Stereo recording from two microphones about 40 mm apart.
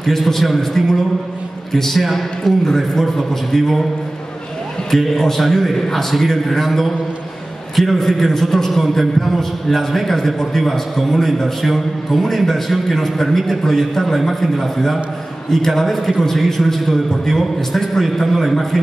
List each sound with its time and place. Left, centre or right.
0.0 s a man's voice: centre
4.9 s a man's voice: centre